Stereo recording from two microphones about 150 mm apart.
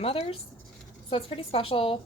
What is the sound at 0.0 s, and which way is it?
A woman's voice, 40° left (ahead or behind).